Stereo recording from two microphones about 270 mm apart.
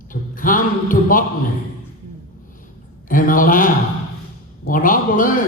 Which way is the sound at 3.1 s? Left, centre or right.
Left.